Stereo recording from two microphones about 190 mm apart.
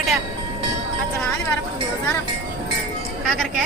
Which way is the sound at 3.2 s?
5° left (ahead or behind).